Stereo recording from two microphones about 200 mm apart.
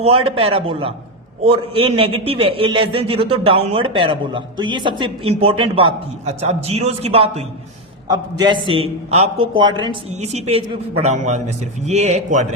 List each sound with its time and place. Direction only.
0.0 s a woman's voice: 30° right (ahead or behind)